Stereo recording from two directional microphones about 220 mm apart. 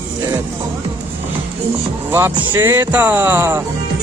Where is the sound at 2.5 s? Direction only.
10° right (ahead or behind).